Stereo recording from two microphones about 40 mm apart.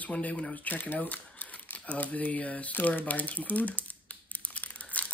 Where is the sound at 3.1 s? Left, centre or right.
Left.